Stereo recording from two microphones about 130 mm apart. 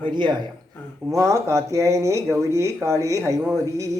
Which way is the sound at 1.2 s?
25° right (ahead or behind).